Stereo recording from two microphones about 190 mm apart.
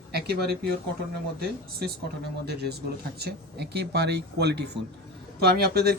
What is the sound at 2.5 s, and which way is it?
Speech, 60° right (ahead or behind).